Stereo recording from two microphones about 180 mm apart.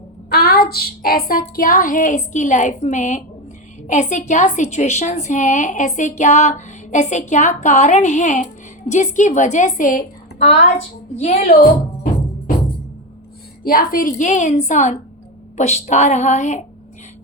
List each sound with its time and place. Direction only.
0.3 s a woman's voice: 60° left (ahead or behind)
11.2 s a woman's voice: 35° left (ahead or behind)
13.7 s a woman's voice: 50° left (ahead or behind)